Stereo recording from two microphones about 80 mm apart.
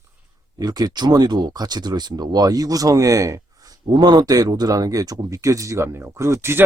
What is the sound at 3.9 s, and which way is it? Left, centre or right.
Speech, right.